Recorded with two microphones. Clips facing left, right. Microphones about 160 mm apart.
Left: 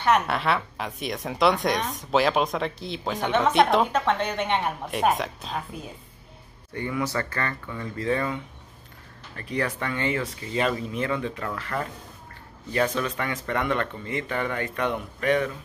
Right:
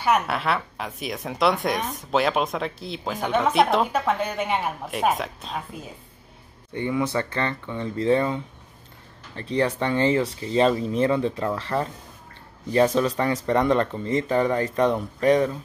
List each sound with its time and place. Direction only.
0.0 s a woman's voice: 5° right (ahead or behind)
6.7 s speech: 20° right (ahead or behind)